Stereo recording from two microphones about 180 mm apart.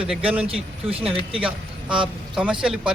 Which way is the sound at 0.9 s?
30° right (ahead or behind).